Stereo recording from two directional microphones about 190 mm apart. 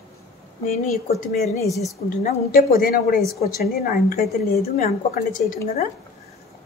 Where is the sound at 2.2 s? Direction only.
50° left (ahead or behind).